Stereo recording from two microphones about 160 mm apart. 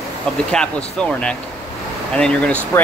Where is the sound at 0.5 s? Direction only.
5° left (ahead or behind).